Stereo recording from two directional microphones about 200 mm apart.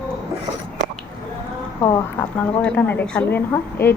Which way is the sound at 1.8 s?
15° left (ahead or behind).